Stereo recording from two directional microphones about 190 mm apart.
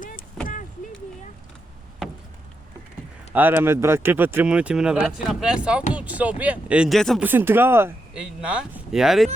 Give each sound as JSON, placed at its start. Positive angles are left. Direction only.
{"t": 0.0, "sound": "vehicle", "side_deg": 45}
{"t": 3.3, "sound": "speech", "side_deg": -10}
{"t": 7.3, "sound": "speech", "side_deg": -10}